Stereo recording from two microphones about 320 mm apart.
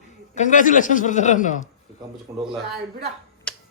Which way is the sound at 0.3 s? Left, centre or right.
Left.